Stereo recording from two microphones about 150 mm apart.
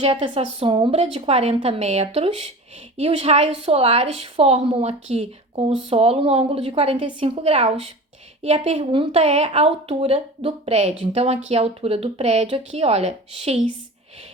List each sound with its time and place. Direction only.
0.0 s a woman's voice: 40° right (ahead or behind)